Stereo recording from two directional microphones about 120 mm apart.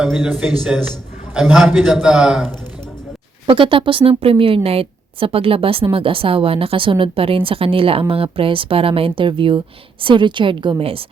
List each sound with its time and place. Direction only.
0.0 s a man's voice: 5° right (ahead or behind)
3.4 s a woman's voice: 45° right (ahead or behind)